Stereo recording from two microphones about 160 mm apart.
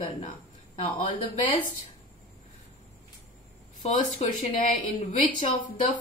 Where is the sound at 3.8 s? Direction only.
45° left (ahead or behind).